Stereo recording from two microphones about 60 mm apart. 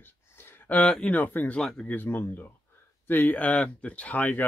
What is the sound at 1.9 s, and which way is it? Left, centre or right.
Speech, left.